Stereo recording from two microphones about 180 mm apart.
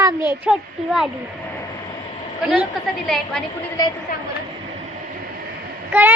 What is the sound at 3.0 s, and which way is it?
Speech, centre (ahead or behind).